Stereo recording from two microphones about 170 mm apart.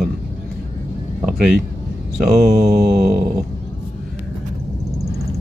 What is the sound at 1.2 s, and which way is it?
Speech, 5° right (ahead or behind).